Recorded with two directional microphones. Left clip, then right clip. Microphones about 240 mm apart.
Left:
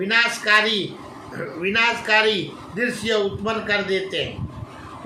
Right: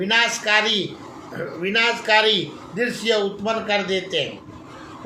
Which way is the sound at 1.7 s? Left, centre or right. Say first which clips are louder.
Right 1 dB; centre.